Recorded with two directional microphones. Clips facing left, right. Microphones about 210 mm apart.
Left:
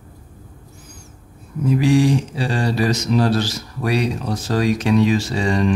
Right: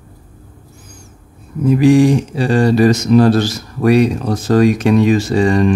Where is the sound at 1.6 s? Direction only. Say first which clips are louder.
Right 6 dB; 50° right (ahead or behind).